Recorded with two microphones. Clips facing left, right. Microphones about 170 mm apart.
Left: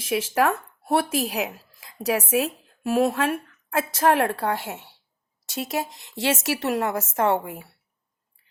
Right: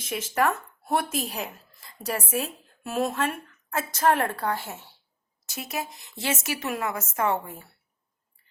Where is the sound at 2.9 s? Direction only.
65° left (ahead or behind).